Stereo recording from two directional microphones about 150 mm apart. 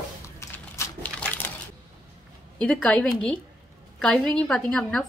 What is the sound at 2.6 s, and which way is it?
A woman's voice, 5° left (ahead or behind).